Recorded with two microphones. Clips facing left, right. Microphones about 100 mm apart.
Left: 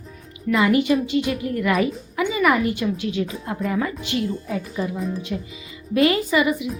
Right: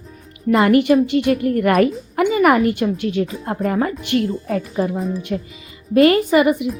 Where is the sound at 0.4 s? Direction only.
40° right (ahead or behind).